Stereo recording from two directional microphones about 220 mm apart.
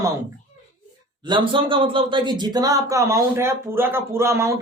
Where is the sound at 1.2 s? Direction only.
20° right (ahead or behind).